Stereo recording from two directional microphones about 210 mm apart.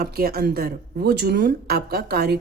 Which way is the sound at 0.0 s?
45° right (ahead or behind).